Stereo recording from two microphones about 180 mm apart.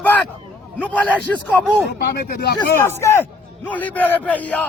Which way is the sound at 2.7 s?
15° left (ahead or behind).